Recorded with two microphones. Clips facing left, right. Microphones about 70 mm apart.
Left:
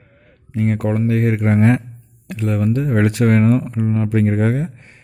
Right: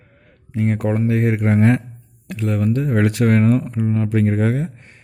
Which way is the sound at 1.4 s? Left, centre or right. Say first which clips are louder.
Left 1 dB; centre.